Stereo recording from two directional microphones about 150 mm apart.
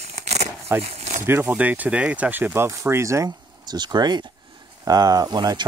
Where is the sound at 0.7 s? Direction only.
45° right (ahead or behind).